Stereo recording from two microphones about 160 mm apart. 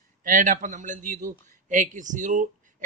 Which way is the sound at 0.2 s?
55° right (ahead or behind).